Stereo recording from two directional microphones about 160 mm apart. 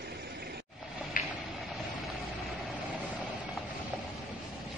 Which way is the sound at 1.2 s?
60° left (ahead or behind).